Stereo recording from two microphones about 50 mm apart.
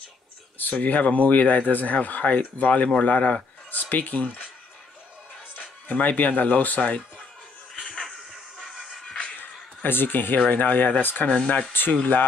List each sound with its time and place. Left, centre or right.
0.6 s speech: left
5.9 s speech: left
8.7 s music: centre
9.8 s speech: left
11.2 s speech: left
11.9 s speech: left